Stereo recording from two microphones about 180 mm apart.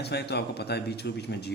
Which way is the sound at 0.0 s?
65° left (ahead or behind).